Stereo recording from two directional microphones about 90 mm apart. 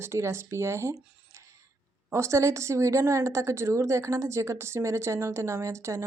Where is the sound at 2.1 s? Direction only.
30° right (ahead or behind).